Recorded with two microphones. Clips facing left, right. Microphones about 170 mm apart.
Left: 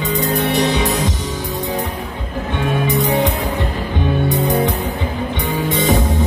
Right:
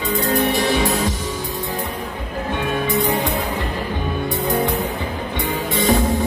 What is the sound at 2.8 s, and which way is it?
Music, 20° left (ahead or behind).